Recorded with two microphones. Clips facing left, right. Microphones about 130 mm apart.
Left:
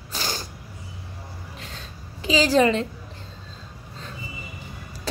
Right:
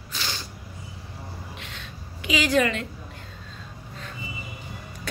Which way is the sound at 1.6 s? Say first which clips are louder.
Left 1 dB; 35° left (ahead or behind).